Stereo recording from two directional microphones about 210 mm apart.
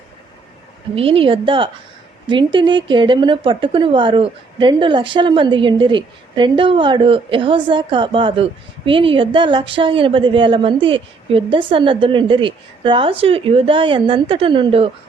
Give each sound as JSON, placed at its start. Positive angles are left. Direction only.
{"t": 0.9, "sound": "a woman's voice", "side_deg": -25}